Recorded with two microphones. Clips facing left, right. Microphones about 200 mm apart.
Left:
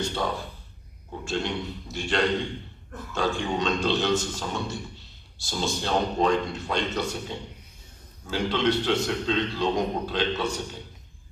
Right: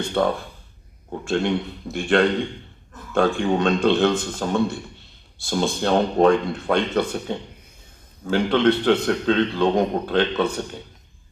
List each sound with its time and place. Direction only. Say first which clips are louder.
0.0 s a man's voice: right 7 dB; 55° right (ahead or behind)